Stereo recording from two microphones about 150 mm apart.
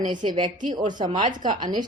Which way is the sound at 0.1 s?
30° right (ahead or behind).